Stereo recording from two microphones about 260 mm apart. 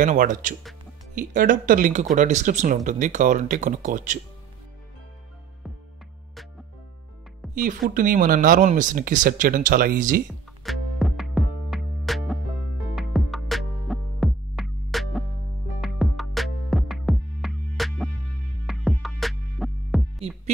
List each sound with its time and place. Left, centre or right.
0.0 s speech: right
7.4 s music: centre
7.9 s speech: right
10.6 s music: centre